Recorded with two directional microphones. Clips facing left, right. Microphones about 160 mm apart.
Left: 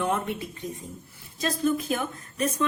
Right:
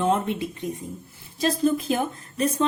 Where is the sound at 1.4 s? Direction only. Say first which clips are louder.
Right 4 dB; 35° right (ahead or behind).